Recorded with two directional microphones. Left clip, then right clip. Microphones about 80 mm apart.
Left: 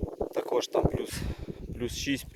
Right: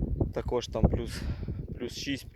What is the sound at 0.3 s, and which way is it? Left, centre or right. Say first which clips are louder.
Speech: left 5 dB; left.